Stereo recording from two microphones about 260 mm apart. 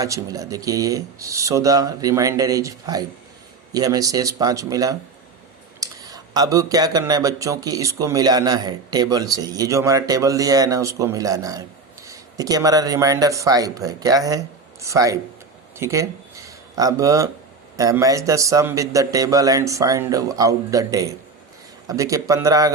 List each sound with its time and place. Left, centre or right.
0.0 s speech: centre